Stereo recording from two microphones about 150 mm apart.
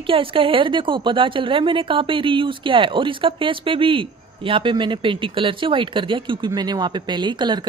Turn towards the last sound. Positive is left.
turn(degrees=-30)  # may be behind; listen again after turning